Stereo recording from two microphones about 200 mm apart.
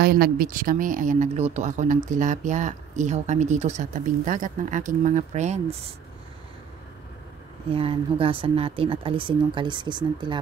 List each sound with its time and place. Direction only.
0.0 s speech: 50° right (ahead or behind); by 5.8 s 35° right (ahead or behind)
7.7 s speech: 30° right (ahead or behind)